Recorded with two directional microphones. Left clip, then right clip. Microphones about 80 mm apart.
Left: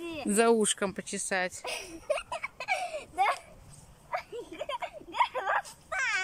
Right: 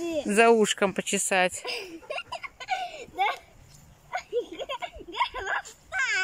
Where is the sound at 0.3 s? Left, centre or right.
Left.